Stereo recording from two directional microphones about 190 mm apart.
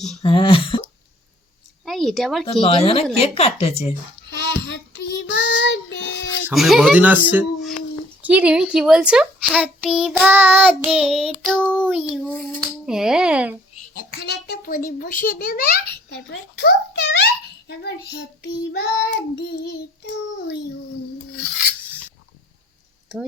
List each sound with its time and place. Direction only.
0.2 s speech: 25° left (ahead or behind)
1.8 s a sound: centre (ahead or behind)
2.5 s speech: 30° left (ahead or behind)
4.3 s child singing: 65° left (ahead or behind)
6.5 s a child's voice: centre (ahead or behind)
13.9 s a child's voice: 55° left (ahead or behind)
17.7 s child singing: 60° left (ahead or behind)